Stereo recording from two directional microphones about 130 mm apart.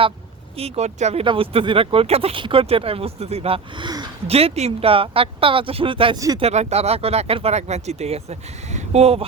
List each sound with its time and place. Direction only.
0.5 s speech: 55° right (ahead or behind)
1.2 s speech: 45° right (ahead or behind)
4.3 s speech: 50° right (ahead or behind)
6.1 s speech: 25° right (ahead or behind)
6.4 s speech: 60° right (ahead or behind)